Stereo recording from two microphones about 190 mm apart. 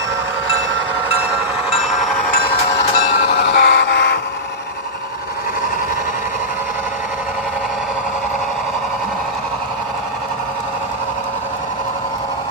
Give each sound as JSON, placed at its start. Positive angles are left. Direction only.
{"t": 3.3, "sound": "vehicle", "side_deg": 55}